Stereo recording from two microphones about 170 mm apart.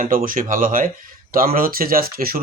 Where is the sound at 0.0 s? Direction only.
55° right (ahead or behind).